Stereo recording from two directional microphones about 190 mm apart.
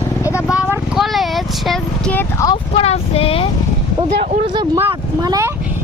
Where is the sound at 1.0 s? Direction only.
Centre (ahead or behind).